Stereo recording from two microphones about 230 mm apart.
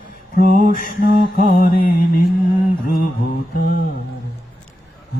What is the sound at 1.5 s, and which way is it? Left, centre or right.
Mantra, left.